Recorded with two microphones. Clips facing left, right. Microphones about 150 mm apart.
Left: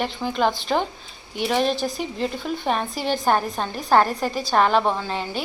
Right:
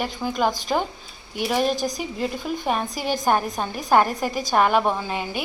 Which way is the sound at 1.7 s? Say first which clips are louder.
Even; 40° right (ahead or behind).